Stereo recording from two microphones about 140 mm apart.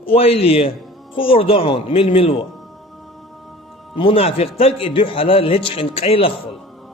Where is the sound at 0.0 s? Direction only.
45° left (ahead or behind).